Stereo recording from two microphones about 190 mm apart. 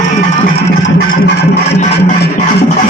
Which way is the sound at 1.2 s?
55° left (ahead or behind).